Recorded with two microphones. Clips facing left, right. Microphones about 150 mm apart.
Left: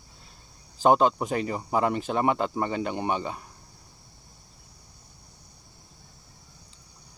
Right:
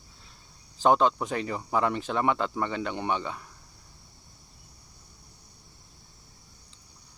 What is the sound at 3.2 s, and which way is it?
Speech, 40° left (ahead or behind).